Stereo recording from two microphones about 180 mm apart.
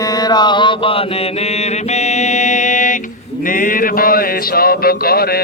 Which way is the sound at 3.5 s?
50° left (ahead or behind).